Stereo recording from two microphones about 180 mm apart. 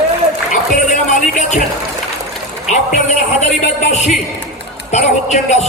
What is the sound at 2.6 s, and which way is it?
A man's voice, 40° left (ahead or behind).